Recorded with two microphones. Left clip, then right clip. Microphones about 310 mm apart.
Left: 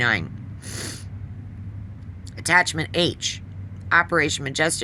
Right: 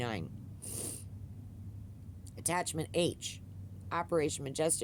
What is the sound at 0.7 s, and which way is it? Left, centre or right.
Snort, right.